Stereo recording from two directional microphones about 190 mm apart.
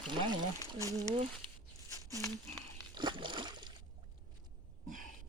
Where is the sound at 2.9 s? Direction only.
25° right (ahead or behind).